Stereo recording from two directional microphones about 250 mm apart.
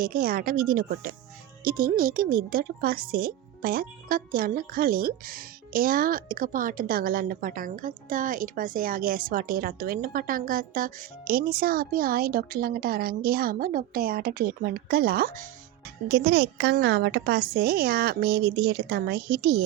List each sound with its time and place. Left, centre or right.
0.0 s speech: right